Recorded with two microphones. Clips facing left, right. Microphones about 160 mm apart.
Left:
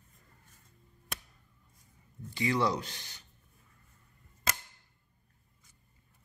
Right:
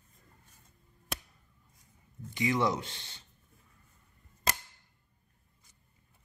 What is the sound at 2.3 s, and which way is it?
Speech, 20° right (ahead or behind).